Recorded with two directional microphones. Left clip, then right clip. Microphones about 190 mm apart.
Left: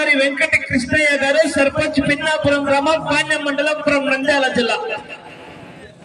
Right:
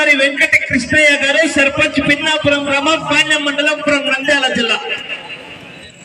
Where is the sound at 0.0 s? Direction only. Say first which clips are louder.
Right 4 dB; 30° left (ahead or behind).